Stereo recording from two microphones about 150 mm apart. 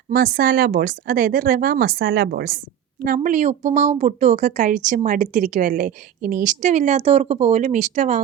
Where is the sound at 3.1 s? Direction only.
55° right (ahead or behind).